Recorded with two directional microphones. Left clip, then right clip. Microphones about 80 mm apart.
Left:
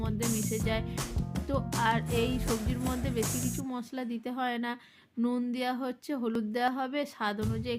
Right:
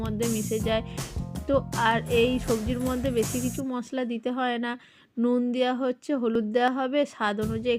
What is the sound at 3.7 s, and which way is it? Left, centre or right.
Speech, right.